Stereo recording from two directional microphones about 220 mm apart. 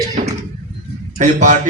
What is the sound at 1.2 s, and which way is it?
Speech, 35° right (ahead or behind).